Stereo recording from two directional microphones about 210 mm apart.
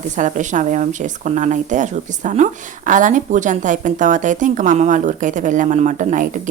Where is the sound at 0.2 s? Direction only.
35° right (ahead or behind).